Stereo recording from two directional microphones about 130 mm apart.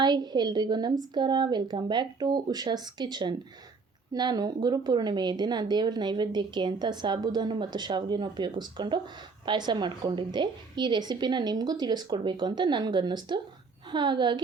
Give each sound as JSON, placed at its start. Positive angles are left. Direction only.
{"t": 0.0, "sound": "speech", "side_deg": -30}